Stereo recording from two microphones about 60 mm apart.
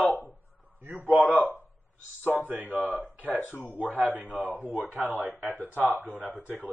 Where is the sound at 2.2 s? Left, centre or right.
Right.